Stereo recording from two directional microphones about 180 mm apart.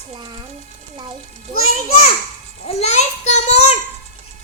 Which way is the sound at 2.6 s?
40° left (ahead or behind).